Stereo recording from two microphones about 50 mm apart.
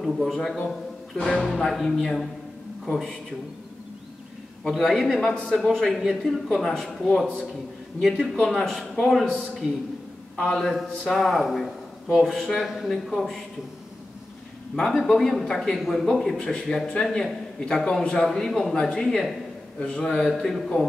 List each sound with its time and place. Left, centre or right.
0.0 s a man's voice: centre
1.7 s a man's voice: centre
4.6 s a man's voice: centre
5.1 s a man's voice: centre
5.6 s a man's voice: centre
9.2 s a man's voice: centre
10.4 s a man's voice: centre
12.6 s a man's voice: centre
15.0 s a man's voice: centre
16.1 s a man's voice: centre